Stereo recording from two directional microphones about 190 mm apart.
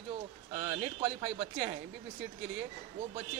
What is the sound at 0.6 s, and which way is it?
Speech, 30° right (ahead or behind).